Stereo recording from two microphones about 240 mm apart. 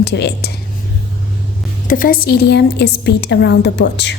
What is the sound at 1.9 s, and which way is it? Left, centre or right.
Speech, left.